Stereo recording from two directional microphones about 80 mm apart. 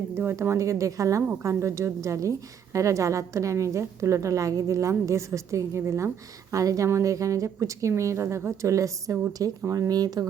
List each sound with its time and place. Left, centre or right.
0.1 s a woman's voice: right